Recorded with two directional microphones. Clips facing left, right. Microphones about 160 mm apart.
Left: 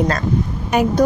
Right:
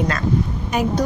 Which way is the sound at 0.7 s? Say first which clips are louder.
Left 4 dB; 65° left (ahead or behind).